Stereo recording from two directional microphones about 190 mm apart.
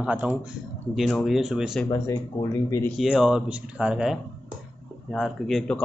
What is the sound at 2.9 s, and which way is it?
Speech, centre (ahead or behind).